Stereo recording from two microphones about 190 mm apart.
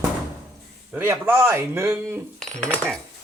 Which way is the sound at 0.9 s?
10° right (ahead or behind).